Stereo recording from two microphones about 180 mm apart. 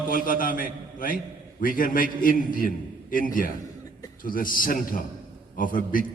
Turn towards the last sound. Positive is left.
turn(degrees=45)  # may be behind; listen again after turning